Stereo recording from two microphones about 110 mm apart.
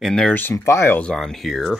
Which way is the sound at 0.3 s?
20° left (ahead or behind).